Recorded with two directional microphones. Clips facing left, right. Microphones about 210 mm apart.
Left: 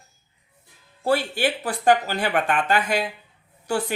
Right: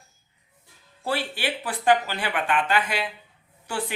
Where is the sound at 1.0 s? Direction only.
45° left (ahead or behind).